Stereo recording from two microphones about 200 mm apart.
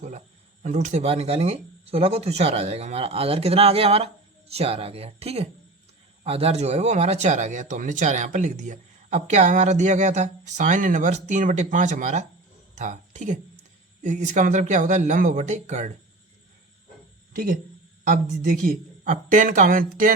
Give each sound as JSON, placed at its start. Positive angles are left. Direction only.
{"t": 0.6, "sound": "speech", "side_deg": -35}
{"t": 18.0, "sound": "speech", "side_deg": -45}